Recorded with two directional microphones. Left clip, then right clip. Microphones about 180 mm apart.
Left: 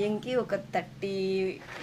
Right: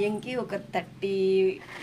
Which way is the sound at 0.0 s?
20° left (ahead or behind).